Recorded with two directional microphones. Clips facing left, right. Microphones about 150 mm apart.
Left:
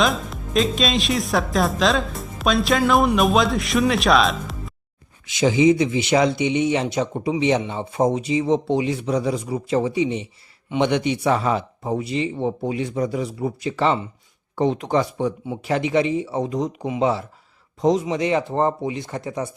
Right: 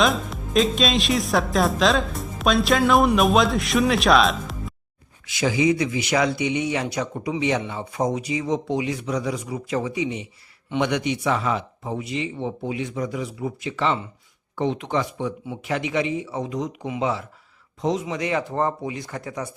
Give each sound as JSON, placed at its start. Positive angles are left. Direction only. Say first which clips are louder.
{"t": 0.0, "sound": "speech", "louder": "even", "side_deg": 0}
{"t": 5.2, "sound": "a man's voice", "louder": "left 4 dB", "side_deg": 20}
{"t": 18.0, "sound": "speech", "louder": "left 4 dB", "side_deg": 25}